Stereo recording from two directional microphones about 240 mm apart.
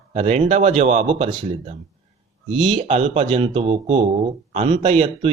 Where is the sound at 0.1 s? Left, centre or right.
Right.